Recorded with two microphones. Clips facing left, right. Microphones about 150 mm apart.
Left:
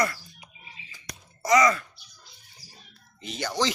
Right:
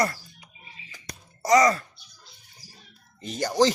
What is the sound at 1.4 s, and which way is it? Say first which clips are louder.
Speech: right 2 dB; 40° right (ahead or behind).